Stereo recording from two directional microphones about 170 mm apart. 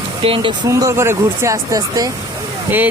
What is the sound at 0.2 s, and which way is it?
Speech, 30° right (ahead or behind).